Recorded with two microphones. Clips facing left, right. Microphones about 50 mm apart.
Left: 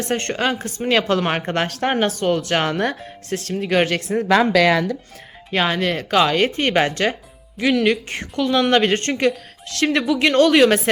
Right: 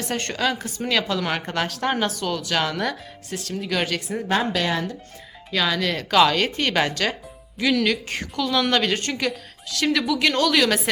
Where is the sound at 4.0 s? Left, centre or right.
Left.